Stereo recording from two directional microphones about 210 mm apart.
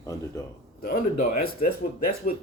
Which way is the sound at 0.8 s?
45° left (ahead or behind).